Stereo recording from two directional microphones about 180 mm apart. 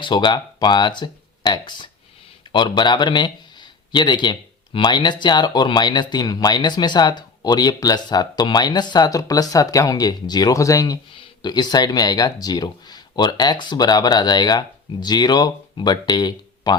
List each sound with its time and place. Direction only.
0.0 s speech: 25° left (ahead or behind)